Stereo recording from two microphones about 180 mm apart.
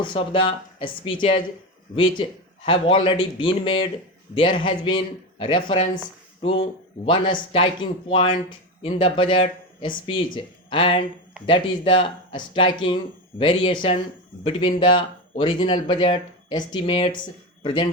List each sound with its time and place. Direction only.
0.0 s speech: 30° left (ahead or behind)